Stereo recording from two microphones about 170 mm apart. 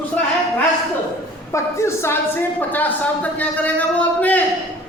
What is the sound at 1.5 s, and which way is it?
A man's voice, 15° left (ahead or behind).